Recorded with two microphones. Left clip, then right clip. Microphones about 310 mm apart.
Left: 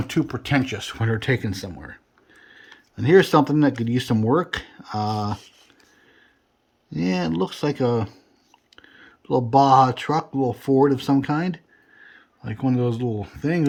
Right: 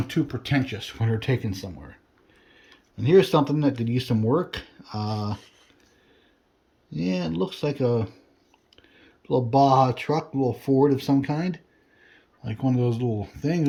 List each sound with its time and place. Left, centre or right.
0.1 s speech: centre
6.9 s speech: centre
9.2 s speech: centre